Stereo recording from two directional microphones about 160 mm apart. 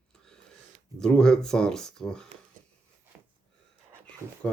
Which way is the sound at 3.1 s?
10° right (ahead or behind).